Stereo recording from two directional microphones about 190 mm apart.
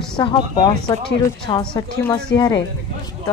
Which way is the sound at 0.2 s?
25° left (ahead or behind).